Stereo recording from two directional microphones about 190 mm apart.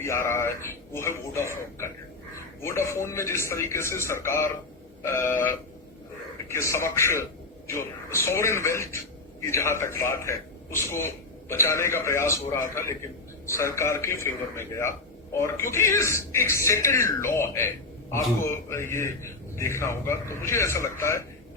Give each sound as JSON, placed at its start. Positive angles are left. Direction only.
{"t": 0.0, "sound": "speech", "side_deg": 15}